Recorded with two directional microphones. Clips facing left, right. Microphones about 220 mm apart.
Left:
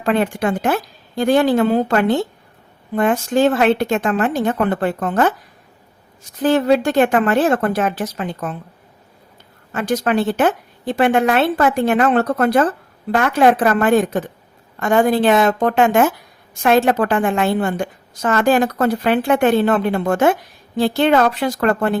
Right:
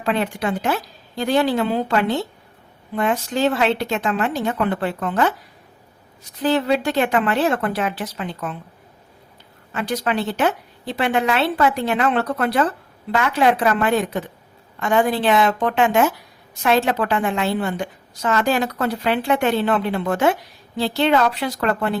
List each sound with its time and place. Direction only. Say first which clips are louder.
0.0 s a woman's voice: left 4 dB; 50° left (ahead or behind)
6.4 s a woman's voice: left 4 dB; 45° left (ahead or behind)
9.7 s a woman's voice: left 5 dB; 45° left (ahead or behind)